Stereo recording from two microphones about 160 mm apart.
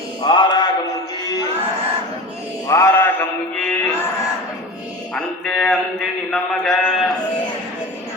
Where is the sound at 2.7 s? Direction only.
20° left (ahead or behind).